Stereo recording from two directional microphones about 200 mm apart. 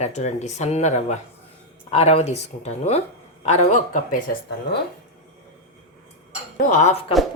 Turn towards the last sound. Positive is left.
turn(degrees=35)  # may be behind; listen again after turning